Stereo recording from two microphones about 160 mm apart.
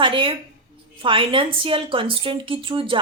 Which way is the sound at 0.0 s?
30° right (ahead or behind).